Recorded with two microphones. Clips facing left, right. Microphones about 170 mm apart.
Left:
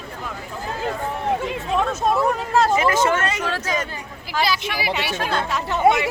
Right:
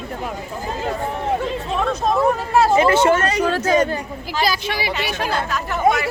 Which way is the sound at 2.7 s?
30° right (ahead or behind).